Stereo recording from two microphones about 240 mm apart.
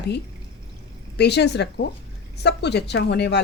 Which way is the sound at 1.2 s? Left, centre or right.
Left.